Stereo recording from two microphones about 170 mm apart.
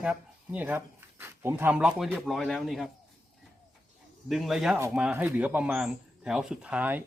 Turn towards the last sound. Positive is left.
turn(degrees=-10)  # may be behind; listen again after turning